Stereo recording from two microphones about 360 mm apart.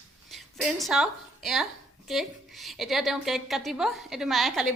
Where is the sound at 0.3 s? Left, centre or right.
Centre.